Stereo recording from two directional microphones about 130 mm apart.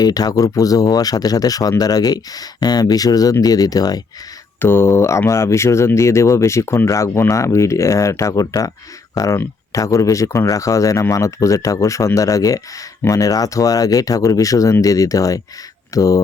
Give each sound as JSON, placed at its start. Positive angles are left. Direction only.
{"t": 0.0, "sound": "speech", "side_deg": 30}
{"t": 4.6, "sound": "speech", "side_deg": 20}